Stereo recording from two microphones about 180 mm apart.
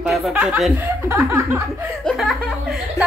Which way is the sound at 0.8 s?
15° right (ahead or behind).